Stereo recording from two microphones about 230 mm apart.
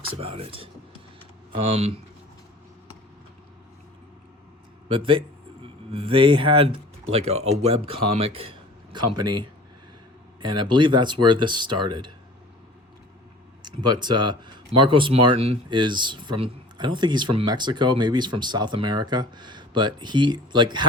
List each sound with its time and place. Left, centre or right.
0.2 s speech: right
4.9 s speech: right
13.6 s speech: centre